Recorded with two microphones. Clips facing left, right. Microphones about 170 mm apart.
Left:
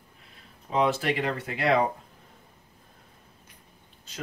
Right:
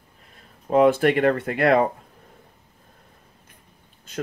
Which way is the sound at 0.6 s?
50° right (ahead or behind).